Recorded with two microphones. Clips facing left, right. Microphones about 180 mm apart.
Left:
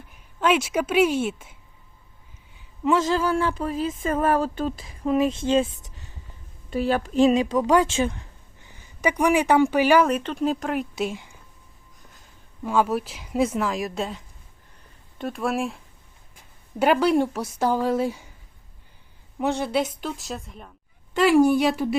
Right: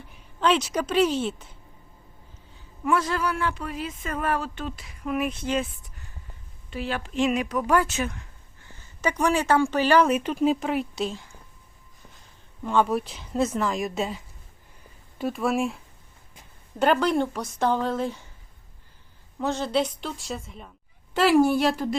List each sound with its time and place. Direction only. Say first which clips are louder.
0.1 s a woman's voice: left 1 dB; 5° left (ahead or behind)
2.8 s speech: left 4 dB; 20° left (ahead or behind)
6.7 s speech: left 7 dB; 40° left (ahead or behind)
8.6 s speech: left 3 dB; 15° left (ahead or behind)
10.1 s speech: right 1 dB; 5° right (ahead or behind)
11.1 s speech: left 3 dB; 15° left (ahead or behind)
12.6 s speech: even; 5° left (ahead or behind)
15.2 s a woman's voice: right 1 dB; centre (ahead or behind)
19.4 s a woman's voice: left 1 dB; 15° left (ahead or behind)